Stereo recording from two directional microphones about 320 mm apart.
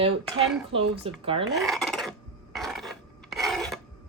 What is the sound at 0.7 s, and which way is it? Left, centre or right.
Speech, centre.